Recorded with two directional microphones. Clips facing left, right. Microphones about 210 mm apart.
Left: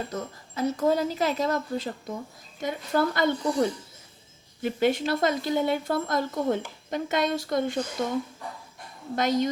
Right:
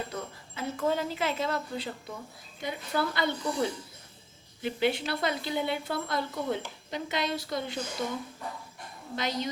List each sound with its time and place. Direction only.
0.1 s speech: 40° left (ahead or behind)
9.1 s speech: 50° left (ahead or behind)